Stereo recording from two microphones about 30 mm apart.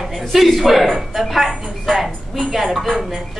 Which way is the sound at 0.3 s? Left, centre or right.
Centre.